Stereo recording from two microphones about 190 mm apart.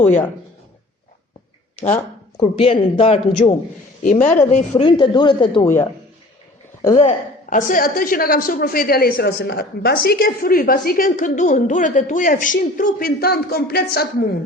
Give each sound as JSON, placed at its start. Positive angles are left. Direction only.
{"t": 2.4, "sound": "a man's voice", "side_deg": 30}
{"t": 4.0, "sound": "a woman's voice", "side_deg": 45}
{"t": 4.8, "sound": "speech", "side_deg": 25}
{"t": 5.6, "sound": "speech", "side_deg": 15}
{"t": 6.9, "sound": "a woman's voice", "side_deg": 35}